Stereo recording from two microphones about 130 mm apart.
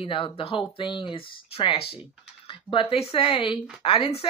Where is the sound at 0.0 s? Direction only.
45° left (ahead or behind).